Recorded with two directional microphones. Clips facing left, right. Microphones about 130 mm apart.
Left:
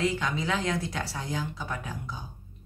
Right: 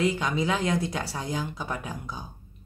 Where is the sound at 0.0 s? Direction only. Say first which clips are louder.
Right 3 dB; 15° right (ahead or behind).